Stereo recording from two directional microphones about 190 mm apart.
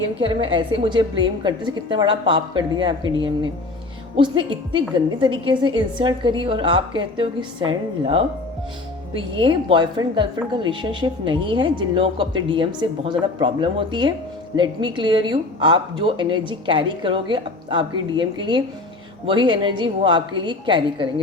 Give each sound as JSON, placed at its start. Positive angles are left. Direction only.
{"t": 0.2, "sound": "a woman's voice", "side_deg": -25}
{"t": 4.2, "sound": "a woman's voice", "side_deg": -25}